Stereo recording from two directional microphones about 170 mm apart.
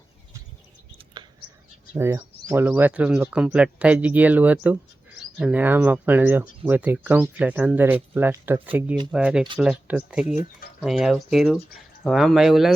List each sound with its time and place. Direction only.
1.2 s whispering: 25° right (ahead or behind)
1.9 s speech: 15° right (ahead or behind)